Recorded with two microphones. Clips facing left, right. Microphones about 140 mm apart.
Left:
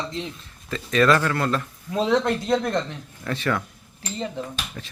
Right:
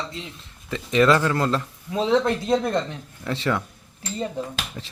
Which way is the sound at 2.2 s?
25° right (ahead or behind).